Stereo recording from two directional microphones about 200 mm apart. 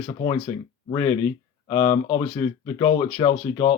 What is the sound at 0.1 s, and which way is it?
Speech, 20° left (ahead or behind).